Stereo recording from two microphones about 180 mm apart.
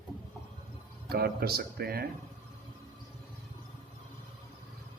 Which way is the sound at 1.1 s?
60° right (ahead or behind).